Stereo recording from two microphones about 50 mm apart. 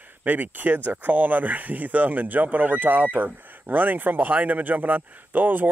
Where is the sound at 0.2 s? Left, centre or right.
Right.